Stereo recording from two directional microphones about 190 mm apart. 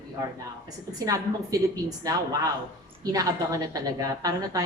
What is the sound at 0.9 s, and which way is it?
A woman's voice, 20° right (ahead or behind).